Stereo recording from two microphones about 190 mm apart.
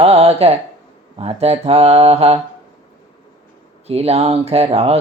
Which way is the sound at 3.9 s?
35° right (ahead or behind).